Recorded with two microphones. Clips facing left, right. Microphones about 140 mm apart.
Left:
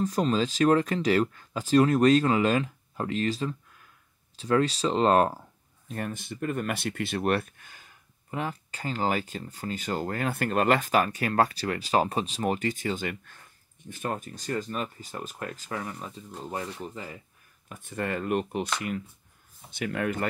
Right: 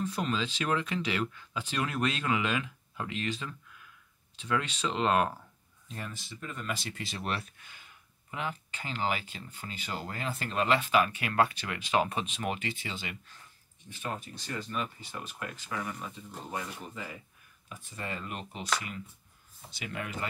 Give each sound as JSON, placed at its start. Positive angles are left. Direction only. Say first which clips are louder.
{"t": 0.0, "sound": "speech", "louder": "left 7 dB", "side_deg": 40}
{"t": 5.9, "sound": "speech", "louder": "left 8 dB", "side_deg": 55}
{"t": 17.6, "sound": "speech", "louder": "left 8 dB", "side_deg": 55}